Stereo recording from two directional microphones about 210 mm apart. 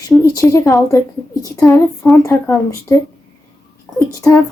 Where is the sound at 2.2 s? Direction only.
15° left (ahead or behind).